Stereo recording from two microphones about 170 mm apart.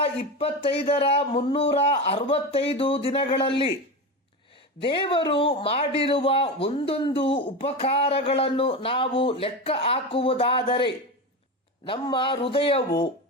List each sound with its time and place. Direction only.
0.0 s a man's voice: 35° left (ahead or behind)
4.8 s a man's voice: 30° left (ahead or behind)